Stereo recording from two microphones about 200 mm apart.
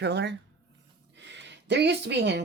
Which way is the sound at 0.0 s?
60° right (ahead or behind).